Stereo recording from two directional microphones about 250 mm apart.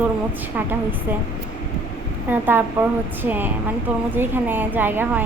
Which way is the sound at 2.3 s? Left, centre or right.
Centre.